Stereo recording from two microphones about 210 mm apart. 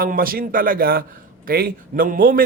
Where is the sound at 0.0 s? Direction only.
45° right (ahead or behind).